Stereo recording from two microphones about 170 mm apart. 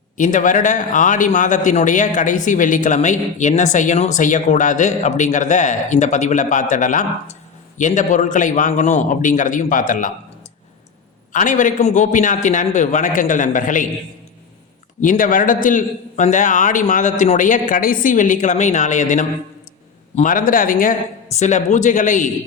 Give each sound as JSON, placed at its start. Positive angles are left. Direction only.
{"t": 0.2, "sound": "a man's voice", "side_deg": 50}
{"t": 11.3, "sound": "a man's voice", "side_deg": 50}
{"t": 15.0, "sound": "a man's voice", "side_deg": 50}
{"t": 21.3, "sound": "a man's voice", "side_deg": 45}